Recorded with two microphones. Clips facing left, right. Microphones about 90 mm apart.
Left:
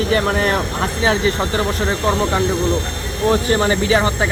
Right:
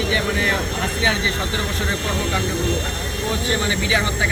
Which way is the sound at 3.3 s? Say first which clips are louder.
Left 8 dB; 45° left (ahead or behind).